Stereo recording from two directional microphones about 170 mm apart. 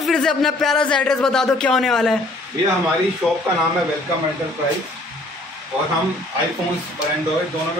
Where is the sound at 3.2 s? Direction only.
Centre (ahead or behind).